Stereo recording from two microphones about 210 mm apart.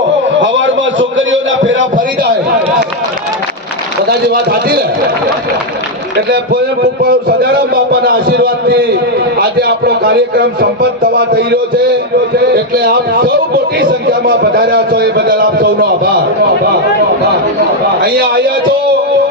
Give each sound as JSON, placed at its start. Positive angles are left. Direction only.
{"t": 0.3, "sound": "a sound", "side_deg": -65}
{"t": 4.1, "sound": "a man's voice", "side_deg": -45}
{"t": 7.0, "sound": "a man's voice", "side_deg": -45}
{"t": 12.7, "sound": "a man's voice", "side_deg": -45}